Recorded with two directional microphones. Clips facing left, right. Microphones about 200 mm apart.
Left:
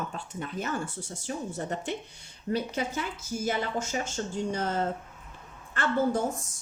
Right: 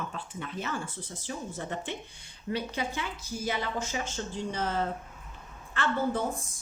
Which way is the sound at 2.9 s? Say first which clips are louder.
Left 3 dB; 45° left (ahead or behind).